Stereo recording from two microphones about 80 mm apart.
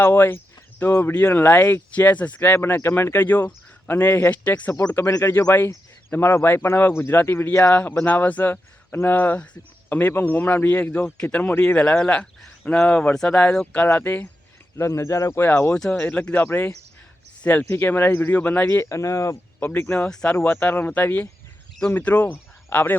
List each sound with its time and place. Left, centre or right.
0.0 s speech: left
2.6 s speech: left
14.8 s speech: left
16.0 s speech: centre
16.3 s speech: left
18.9 s speech: left
19.5 s speech: left